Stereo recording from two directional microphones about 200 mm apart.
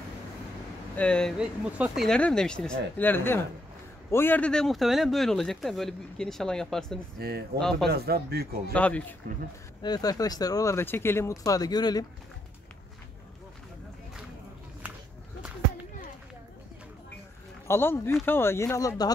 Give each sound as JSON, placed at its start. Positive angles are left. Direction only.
{"t": 0.9, "sound": "speech", "side_deg": 5}
{"t": 7.2, "sound": "speech", "side_deg": -50}
{"t": 7.5, "sound": "speech", "side_deg": 5}
{"t": 7.9, "sound": "speech", "side_deg": -50}
{"t": 8.7, "sound": "speech", "side_deg": 5}
{"t": 9.8, "sound": "speech", "side_deg": 20}
{"t": 17.6, "sound": "speech", "side_deg": 10}